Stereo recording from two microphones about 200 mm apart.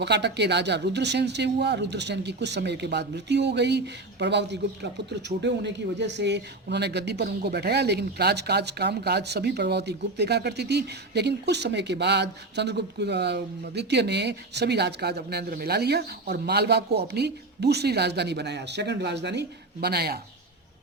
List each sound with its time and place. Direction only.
0.0 s speech: 60° right (ahead or behind)